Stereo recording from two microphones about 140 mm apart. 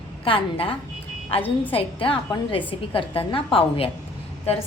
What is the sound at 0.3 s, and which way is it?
A woman's voice, 40° left (ahead or behind).